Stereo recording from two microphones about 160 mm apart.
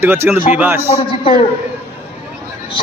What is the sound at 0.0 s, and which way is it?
Speech, 15° right (ahead or behind).